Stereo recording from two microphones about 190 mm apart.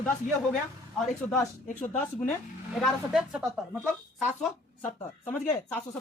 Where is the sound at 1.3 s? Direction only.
15° left (ahead or behind).